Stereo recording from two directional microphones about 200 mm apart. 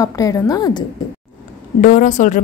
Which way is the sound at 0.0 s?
15° left (ahead or behind).